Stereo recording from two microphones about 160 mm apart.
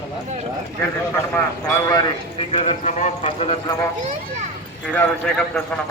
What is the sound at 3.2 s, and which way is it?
Speech, 35° left (ahead or behind).